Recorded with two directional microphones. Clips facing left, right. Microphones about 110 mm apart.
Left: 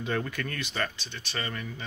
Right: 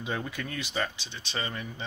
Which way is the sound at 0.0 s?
15° right (ahead or behind).